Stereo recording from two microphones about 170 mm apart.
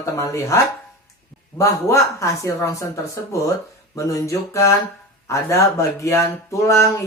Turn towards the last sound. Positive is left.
turn(degrees=15)  # may be behind; listen again after turning